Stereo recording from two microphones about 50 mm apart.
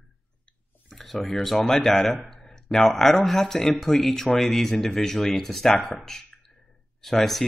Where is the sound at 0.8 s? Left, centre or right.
Centre.